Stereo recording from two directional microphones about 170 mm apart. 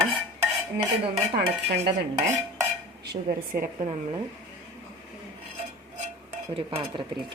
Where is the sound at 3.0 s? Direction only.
55° right (ahead or behind).